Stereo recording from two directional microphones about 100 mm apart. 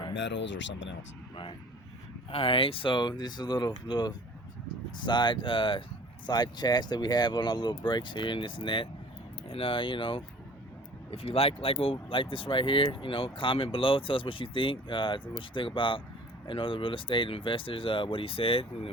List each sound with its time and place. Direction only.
2.3 s speech: 65° left (ahead or behind)
6.2 s speech: 45° left (ahead or behind)
11.1 s speech: 80° left